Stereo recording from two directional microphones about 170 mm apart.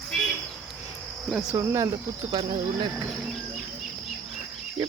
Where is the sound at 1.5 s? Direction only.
15° right (ahead or behind).